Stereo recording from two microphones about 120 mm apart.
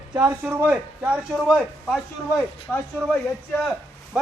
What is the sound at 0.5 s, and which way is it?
A man's voice, 15° right (ahead or behind).